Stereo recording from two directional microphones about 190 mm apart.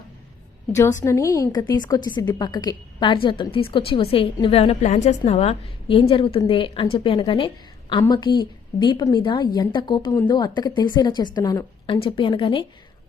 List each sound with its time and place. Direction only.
0.7 s a woman's voice: 15° left (ahead or behind)